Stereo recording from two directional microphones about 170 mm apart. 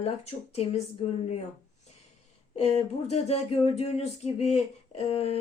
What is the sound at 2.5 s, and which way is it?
Speech, 40° left (ahead or behind).